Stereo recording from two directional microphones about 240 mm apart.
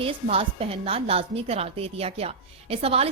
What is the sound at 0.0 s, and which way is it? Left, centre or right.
A woman's voice, right.